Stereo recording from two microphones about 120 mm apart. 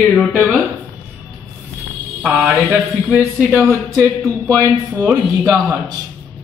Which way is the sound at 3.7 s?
30° right (ahead or behind).